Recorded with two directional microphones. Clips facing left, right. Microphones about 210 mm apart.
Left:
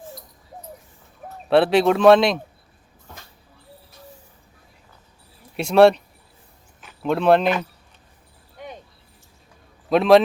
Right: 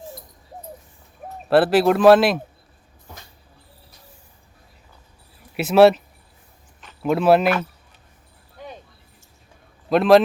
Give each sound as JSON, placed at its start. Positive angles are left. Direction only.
{"t": 1.5, "sound": "a man's voice", "side_deg": -5}
{"t": 5.5, "sound": "a man's voice", "side_deg": -5}
{"t": 7.0, "sound": "a man's voice", "side_deg": -5}
{"t": 9.9, "sound": "a man's voice", "side_deg": 0}